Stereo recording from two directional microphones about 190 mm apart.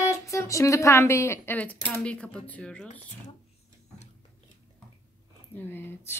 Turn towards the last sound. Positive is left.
turn(degrees=10)  # may be behind; listen again after turning